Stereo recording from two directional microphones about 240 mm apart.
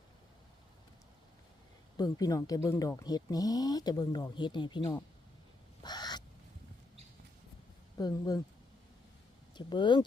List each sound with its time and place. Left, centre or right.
2.0 s speech: centre
5.8 s owl: centre
7.9 s speech: centre
9.6 s speech: centre